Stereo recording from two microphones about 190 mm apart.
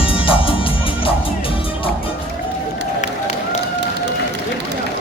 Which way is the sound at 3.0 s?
35° left (ahead or behind).